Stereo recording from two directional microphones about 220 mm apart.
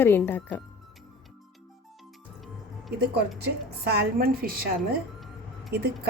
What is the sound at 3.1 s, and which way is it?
A woman's voice, 50° right (ahead or behind).